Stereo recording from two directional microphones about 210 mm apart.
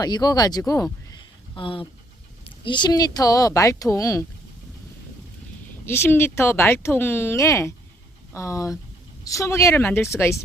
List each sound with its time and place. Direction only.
0.0 s speech: 20° left (ahead or behind)
5.8 s speech: 10° left (ahead or behind)